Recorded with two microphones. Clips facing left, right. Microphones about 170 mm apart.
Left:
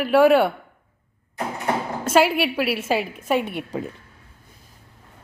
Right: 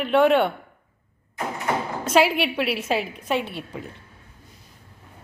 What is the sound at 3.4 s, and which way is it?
Speech, 45° left (ahead or behind).